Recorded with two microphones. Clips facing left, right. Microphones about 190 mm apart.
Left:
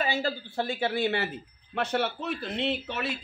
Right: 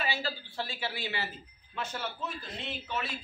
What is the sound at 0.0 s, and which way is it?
Speech, 50° left (ahead or behind).